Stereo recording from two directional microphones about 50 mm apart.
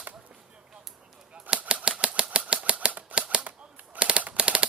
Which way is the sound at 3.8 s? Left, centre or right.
Right.